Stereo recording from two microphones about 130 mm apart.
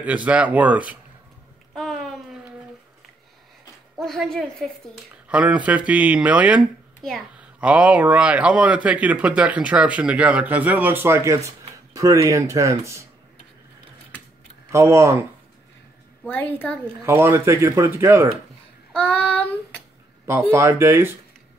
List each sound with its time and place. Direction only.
0.0 s speech: 10° right (ahead or behind)
1.7 s a sound: centre (ahead or behind)
4.0 s a woman's voice: 5° left (ahead or behind)
5.3 s speech: 10° right (ahead or behind)
7.0 s a woman's voice: centre (ahead or behind)
7.3 s speech: 10° right (ahead or behind)
14.7 s speech: 20° right (ahead or behind)
16.3 s a woman's voice: 15° left (ahead or behind)
17.0 s speech: 20° right (ahead or behind)
18.9 s child singing: 10° left (ahead or behind)
20.5 s speech: 20° right (ahead or behind)